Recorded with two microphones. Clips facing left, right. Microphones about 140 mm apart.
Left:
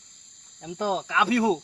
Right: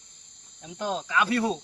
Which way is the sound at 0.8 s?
25° left (ahead or behind).